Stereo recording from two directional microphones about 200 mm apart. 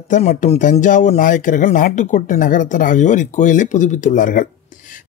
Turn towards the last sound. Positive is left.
turn(degrees=40)  # may be behind; listen again after turning